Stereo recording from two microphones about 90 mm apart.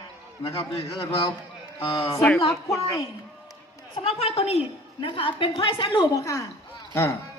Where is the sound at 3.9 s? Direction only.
90° left; by 6.0 s 70° left (ahead or behind).